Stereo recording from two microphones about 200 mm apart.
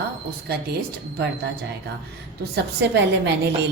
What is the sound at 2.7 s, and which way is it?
Speech, 60° right (ahead or behind).